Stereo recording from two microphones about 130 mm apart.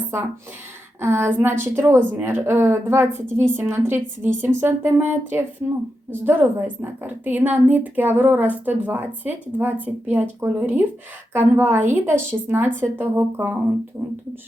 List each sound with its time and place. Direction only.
1.0 s a woman's voice: 20° right (ahead or behind)